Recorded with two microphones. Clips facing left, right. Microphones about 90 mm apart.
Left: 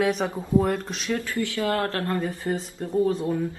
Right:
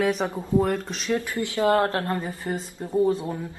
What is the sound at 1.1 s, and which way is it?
Speech, 20° right (ahead or behind).